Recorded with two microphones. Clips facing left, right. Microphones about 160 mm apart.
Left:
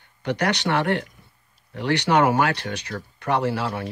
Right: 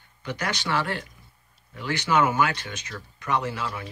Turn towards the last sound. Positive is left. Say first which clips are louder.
# left 5 dB
turn(degrees=60)  # may be behind; listen again after turning